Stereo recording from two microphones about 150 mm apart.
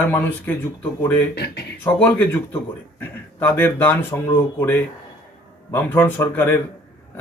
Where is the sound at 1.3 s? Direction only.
90° left.